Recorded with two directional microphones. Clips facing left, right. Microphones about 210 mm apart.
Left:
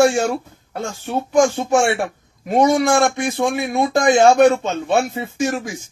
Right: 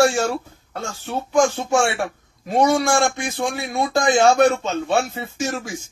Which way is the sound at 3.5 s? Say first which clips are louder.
Left 4 dB; 20° left (ahead or behind).